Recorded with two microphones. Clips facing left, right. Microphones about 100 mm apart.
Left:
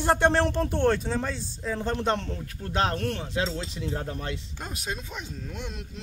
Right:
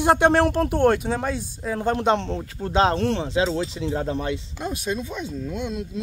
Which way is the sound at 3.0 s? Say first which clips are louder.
Right 7 dB; 90° right.